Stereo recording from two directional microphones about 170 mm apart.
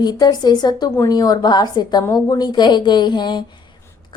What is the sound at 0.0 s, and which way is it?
A woman's voice, 25° left (ahead or behind).